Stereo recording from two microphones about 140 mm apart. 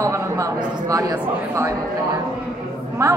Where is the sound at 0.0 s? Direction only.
20° right (ahead or behind).